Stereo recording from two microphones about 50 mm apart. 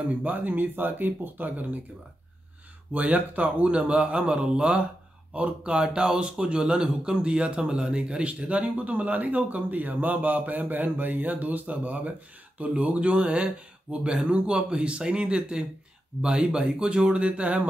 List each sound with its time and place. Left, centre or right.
0.0 s speech: right
2.9 s a man's voice: right